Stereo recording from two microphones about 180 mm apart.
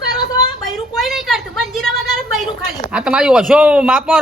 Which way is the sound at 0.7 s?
Centre (ahead or behind).